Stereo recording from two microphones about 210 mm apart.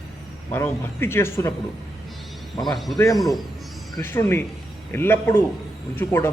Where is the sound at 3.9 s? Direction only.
10° left (ahead or behind).